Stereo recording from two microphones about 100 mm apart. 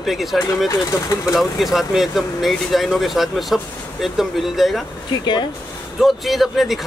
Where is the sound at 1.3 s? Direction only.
Centre (ahead or behind).